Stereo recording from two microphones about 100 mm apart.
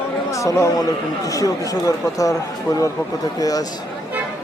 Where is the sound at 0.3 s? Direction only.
30° left (ahead or behind).